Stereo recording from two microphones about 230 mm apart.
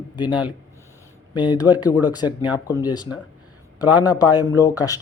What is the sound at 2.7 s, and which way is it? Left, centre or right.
Speech, centre.